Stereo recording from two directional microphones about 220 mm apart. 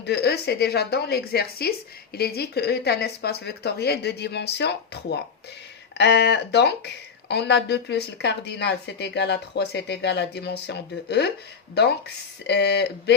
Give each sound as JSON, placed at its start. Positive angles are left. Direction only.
{"t": 0.0, "sound": "speech", "side_deg": 50}